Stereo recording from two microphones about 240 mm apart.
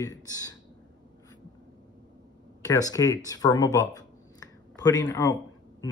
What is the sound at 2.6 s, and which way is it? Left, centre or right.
Speech, centre.